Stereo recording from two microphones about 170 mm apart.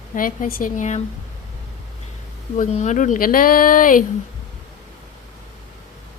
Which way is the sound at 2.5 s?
45° left (ahead or behind).